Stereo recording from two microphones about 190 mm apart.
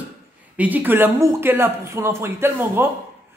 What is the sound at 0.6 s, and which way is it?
Speech, 10° right (ahead or behind).